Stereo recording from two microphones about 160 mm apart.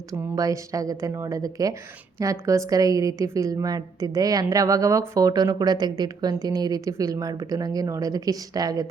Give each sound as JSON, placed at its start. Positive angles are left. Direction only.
{"t": 0.1, "sound": "a woman's voice", "side_deg": -20}